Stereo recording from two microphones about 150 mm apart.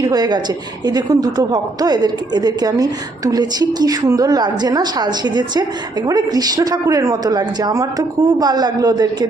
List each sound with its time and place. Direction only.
0.0 s a woman's voice: 25° right (ahead or behind)